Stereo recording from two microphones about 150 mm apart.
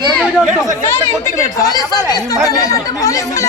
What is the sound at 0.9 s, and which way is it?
Speech, 20° left (ahead or behind).